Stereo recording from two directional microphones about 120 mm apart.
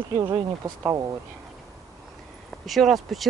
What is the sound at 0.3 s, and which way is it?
Speech, 30° right (ahead or behind).